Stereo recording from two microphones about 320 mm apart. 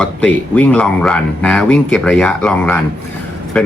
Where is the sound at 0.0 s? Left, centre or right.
Centre.